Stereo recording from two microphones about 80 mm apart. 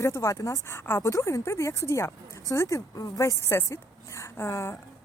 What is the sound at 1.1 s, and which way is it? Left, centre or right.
Speech, left.